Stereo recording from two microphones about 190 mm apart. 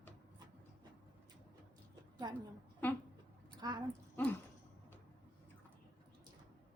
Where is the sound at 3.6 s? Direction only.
20° right (ahead or behind).